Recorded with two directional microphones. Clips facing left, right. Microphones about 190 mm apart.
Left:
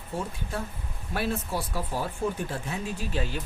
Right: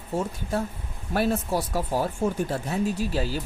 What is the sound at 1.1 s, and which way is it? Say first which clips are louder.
Speech: right 5 dB; 40° right (ahead or behind).